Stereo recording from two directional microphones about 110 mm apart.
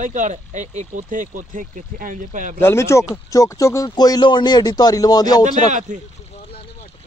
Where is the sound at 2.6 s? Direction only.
25° left (ahead or behind).